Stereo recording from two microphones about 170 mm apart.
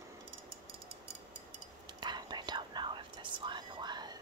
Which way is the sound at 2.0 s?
25° right (ahead or behind).